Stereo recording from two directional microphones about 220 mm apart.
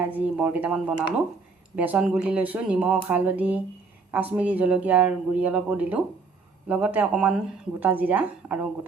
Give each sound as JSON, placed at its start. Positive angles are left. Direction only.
{"t": 0.0, "sound": "speech", "side_deg": -5}